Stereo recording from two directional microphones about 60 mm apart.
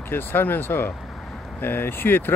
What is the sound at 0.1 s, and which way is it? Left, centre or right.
Speech, left.